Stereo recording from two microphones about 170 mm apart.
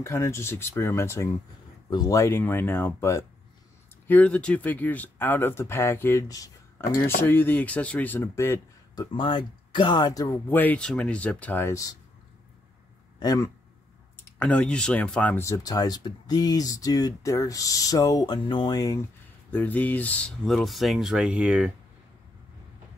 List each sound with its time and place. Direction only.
0.0 s speech: 15° left (ahead or behind)
9.1 s speech: 30° left (ahead or behind)
13.2 s speech: 20° left (ahead or behind)
14.4 s speech: 5° left (ahead or behind)
19.5 s speech: 10° left (ahead or behind); by 21.7 s 5° right (ahead or behind)